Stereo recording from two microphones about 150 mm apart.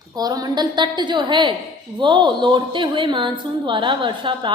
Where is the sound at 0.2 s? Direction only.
25° right (ahead or behind).